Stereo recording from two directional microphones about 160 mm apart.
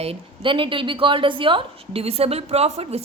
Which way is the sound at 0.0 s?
35° right (ahead or behind).